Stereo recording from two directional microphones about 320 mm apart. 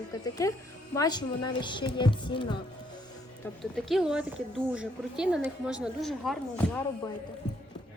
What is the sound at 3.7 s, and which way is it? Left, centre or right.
A woman's voice, centre.